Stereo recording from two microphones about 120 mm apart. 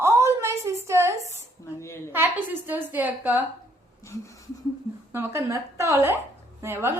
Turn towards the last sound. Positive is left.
turn(degrees=-20)  # may be behind; listen again after turning